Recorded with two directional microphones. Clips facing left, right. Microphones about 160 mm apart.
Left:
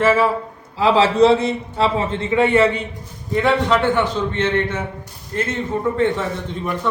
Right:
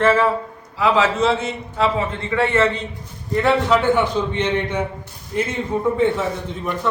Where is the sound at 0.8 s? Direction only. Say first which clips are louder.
Left 4 dB; 30° left (ahead or behind).